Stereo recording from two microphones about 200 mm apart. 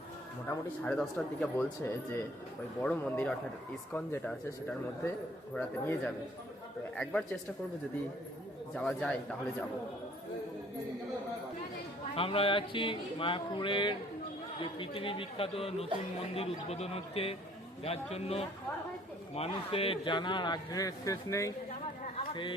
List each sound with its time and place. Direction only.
0.4 s speech: 10° left (ahead or behind)
5.5 s a man's voice: 10° left (ahead or behind)
8.7 s a man's voice: 5° left (ahead or behind)
12.1 s a man's voice: 30° left (ahead or behind)
22.2 s a sound: 25° left (ahead or behind)